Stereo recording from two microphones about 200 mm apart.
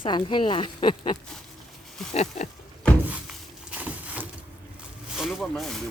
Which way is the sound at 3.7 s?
5° right (ahead or behind).